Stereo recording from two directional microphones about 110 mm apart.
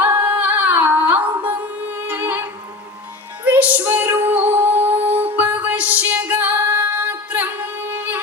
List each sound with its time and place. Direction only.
0.0 s music: 15° right (ahead or behind)
3.4 s female singing: 15° right (ahead or behind)
5.4 s music: 15° right (ahead or behind)